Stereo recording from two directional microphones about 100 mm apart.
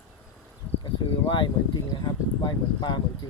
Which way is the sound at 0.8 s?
50° left (ahead or behind).